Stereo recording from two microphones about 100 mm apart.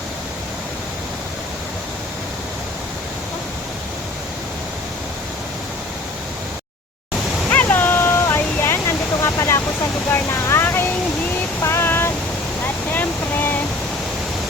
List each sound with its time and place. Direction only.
7.5 s a sound: 20° left (ahead or behind)
10.1 s vehicle: 25° left (ahead or behind)
11.6 s child singing: 25° left (ahead or behind)
12.9 s boat: 20° left (ahead or behind)